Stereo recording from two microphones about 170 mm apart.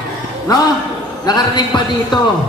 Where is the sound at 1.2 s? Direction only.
25° left (ahead or behind).